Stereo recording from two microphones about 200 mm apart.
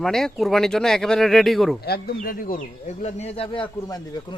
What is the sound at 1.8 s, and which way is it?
Speech, 50° left (ahead or behind).